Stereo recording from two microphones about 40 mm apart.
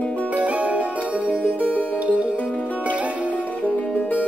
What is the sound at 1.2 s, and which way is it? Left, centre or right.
Music, left.